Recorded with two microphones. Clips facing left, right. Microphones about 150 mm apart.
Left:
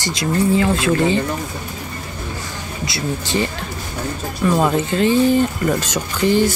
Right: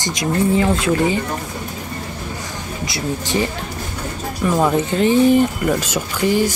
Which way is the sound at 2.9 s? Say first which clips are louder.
Even; 15° right (ahead or behind).